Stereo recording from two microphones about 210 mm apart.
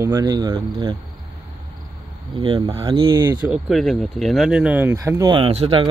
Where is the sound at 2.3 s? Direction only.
25° right (ahead or behind).